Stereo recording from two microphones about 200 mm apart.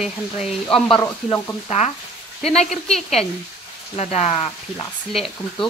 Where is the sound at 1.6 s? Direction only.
35° left (ahead or behind).